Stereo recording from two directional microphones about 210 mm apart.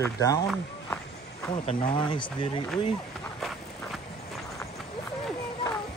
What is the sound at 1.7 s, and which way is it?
Speech, 25° left (ahead or behind).